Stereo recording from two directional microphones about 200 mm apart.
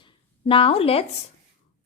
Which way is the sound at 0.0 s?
25° left (ahead or behind).